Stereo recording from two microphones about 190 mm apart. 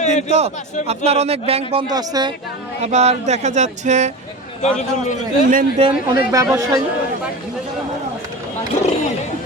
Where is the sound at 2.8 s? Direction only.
35° right (ahead or behind).